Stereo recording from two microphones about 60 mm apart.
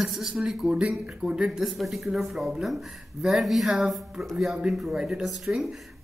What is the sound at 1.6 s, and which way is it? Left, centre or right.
Speech, centre.